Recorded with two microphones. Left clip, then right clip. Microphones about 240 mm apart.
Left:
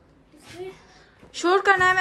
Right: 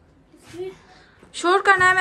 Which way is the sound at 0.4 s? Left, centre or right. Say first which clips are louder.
Right 4 dB; centre.